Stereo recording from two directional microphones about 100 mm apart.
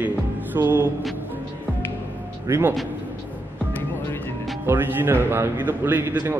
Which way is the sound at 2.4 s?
25° right (ahead or behind).